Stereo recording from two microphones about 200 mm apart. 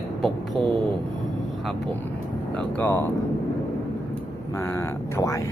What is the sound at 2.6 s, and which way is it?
Speech, 10° left (ahead or behind).